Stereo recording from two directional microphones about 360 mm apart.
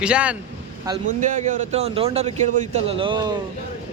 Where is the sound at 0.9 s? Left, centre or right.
Right.